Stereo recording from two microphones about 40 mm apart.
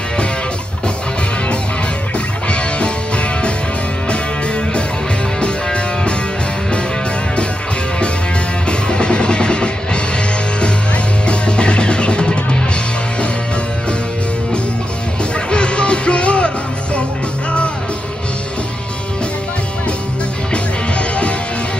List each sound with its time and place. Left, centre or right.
2.1 s music: left
8.6 s music: left
11.2 s music: left
15.3 s music: left
20.5 s music: left